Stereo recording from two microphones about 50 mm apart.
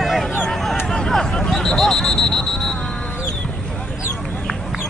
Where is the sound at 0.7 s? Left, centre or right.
Centre.